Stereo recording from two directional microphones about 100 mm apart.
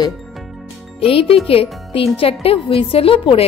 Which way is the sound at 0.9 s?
70° left (ahead or behind).